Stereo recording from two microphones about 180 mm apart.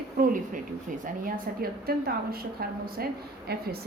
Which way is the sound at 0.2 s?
50° right (ahead or behind).